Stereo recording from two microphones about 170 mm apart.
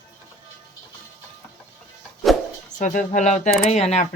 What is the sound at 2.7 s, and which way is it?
Speech, 50° left (ahead or behind).